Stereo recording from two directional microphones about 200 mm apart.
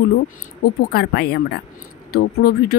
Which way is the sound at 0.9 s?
50° left (ahead or behind).